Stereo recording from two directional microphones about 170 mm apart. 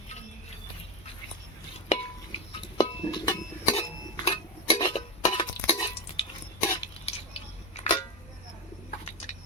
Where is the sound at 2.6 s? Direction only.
25° left (ahead or behind).